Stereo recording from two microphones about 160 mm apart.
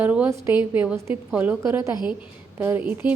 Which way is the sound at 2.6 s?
10° right (ahead or behind).